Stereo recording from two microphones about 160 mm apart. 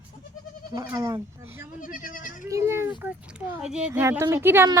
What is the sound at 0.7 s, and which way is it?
Speech, 20° right (ahead or behind).